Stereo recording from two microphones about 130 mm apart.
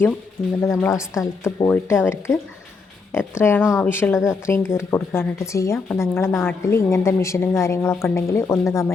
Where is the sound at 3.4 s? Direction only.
20° left (ahead or behind).